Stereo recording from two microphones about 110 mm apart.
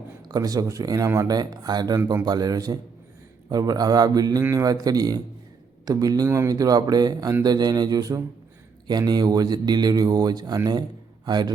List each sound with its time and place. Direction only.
0.2 s speech: 35° right (ahead or behind)